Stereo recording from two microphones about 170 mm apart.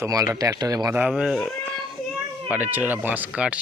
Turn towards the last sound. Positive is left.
turn(degrees=-5)  # may be behind; listen again after turning